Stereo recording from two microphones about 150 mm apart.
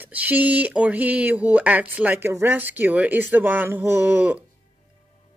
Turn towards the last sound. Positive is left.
turn(degrees=-10)  # may be behind; listen again after turning